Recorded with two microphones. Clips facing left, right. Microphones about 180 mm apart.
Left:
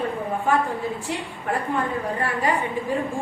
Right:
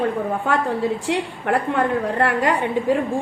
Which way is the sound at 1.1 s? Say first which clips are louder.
Right 6 dB; 85° right.